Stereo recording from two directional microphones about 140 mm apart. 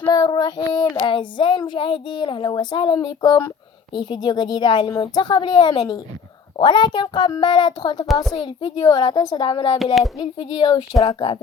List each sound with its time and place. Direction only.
0.1 s child singing: 30° left (ahead or behind)
9.7 s speech: centre (ahead or behind)
10.0 s child singing: 40° left (ahead or behind)